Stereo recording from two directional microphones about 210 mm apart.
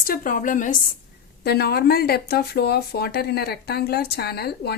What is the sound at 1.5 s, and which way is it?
Speech, 50° left (ahead or behind).